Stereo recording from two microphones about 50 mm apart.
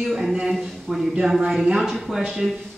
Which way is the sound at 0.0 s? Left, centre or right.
Centre.